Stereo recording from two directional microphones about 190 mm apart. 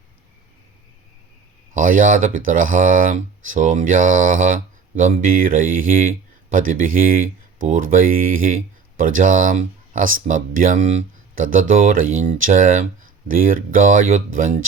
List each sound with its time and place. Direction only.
1.7 s speech: 45° right (ahead or behind)